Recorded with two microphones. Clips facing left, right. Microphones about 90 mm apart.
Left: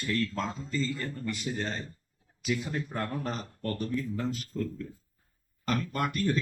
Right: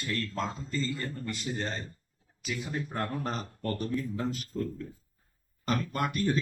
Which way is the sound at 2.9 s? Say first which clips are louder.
Right 2 dB; 35° right (ahead or behind).